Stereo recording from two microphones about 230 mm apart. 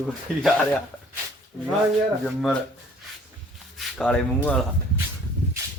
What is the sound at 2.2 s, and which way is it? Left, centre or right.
Speech, centre.